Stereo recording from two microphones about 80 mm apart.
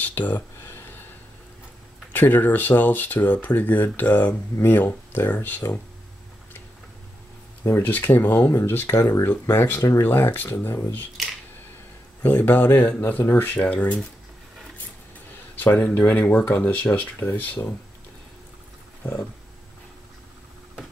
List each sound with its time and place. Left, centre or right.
0.0 s speech: left
0.7 s a sound: left
2.1 s speech: left
7.8 s speech: left
9.8 s speech: left
10.0 s speech: left
12.2 s speech: left
15.5 s speech: left